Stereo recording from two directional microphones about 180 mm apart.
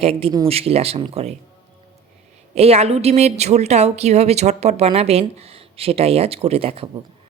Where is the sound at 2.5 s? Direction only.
35° right (ahead or behind).